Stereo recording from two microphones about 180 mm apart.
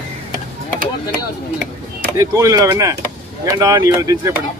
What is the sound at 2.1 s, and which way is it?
Speech, 20° right (ahead or behind).